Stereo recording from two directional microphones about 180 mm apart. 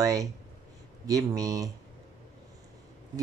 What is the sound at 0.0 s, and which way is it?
Speech, 20° right (ahead or behind).